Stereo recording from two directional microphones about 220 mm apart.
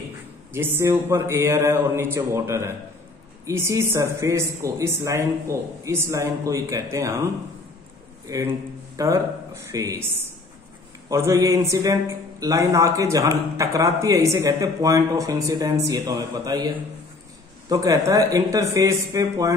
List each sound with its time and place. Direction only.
0.5 s a man's voice: 10° right (ahead or behind)
8.3 s a man's voice: 15° right (ahead or behind)
11.1 s a man's voice: 15° right (ahead or behind)